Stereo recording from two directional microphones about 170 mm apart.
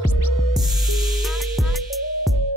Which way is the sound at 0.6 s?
Centre (ahead or behind).